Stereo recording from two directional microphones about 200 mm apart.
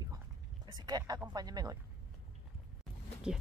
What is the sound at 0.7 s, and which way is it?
Speech, 20° right (ahead or behind).